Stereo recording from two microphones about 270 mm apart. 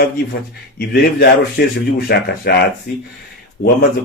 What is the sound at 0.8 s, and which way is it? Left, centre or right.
Speech, left.